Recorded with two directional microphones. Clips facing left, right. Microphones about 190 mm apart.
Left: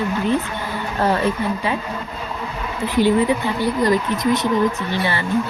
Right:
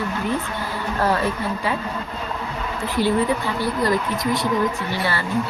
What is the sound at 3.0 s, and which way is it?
Speech, 15° left (ahead or behind).